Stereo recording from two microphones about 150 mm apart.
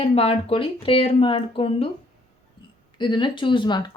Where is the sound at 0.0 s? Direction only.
40° left (ahead or behind).